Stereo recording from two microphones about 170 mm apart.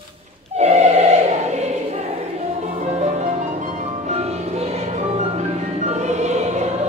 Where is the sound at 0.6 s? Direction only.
40° right (ahead or behind).